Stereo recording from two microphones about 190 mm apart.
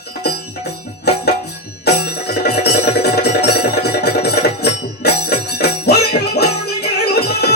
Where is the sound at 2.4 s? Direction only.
60° left (ahead or behind).